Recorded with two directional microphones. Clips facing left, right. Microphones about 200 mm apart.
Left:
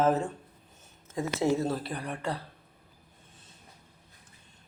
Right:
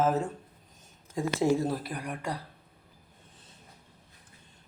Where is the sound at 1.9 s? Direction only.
15° right (ahead or behind).